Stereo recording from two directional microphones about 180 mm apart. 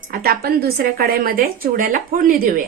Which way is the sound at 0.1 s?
60° right (ahead or behind).